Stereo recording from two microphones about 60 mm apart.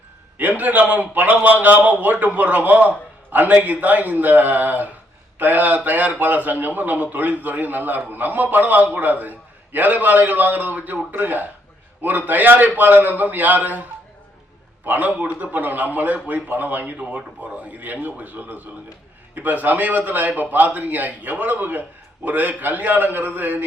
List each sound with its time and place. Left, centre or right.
0.3 s a man's voice: right
14.8 s a man's voice: right